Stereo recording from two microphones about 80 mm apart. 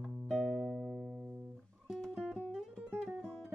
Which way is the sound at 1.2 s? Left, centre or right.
Centre.